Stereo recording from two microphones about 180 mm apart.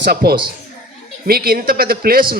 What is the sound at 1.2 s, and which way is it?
A woman's voice, 55° right (ahead or behind).